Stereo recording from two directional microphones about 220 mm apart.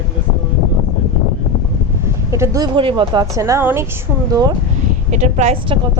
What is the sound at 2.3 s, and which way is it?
A woman's voice, 15° right (ahead or behind).